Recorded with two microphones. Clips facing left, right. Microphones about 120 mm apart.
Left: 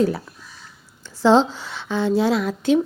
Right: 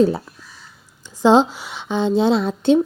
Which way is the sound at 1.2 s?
15° right (ahead or behind).